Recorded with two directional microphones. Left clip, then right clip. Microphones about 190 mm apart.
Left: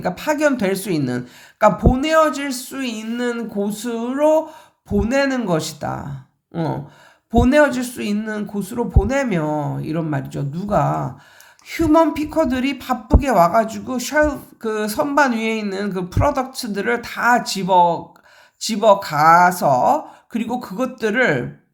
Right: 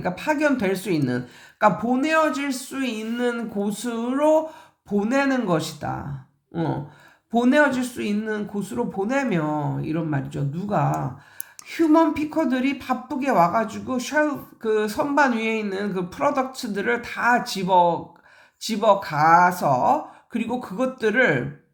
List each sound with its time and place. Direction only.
0.0 s a woman's voice: 20° left (ahead or behind)